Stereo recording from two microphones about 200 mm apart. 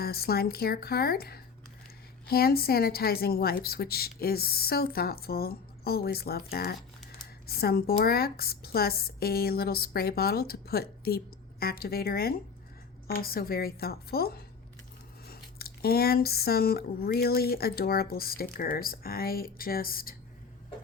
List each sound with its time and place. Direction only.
0.0 s speech: 50° left (ahead or behind)